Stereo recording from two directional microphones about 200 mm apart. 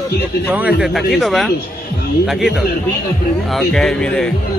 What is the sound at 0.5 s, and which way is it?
Speech, 5° right (ahead or behind).